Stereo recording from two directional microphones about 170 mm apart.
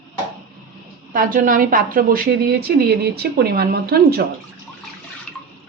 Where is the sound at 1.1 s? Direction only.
55° right (ahead or behind).